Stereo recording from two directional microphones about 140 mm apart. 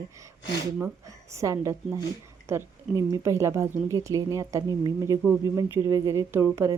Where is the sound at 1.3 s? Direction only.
20° right (ahead or behind).